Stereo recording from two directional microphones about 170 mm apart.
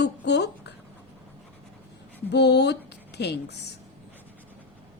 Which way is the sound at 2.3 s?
80° left.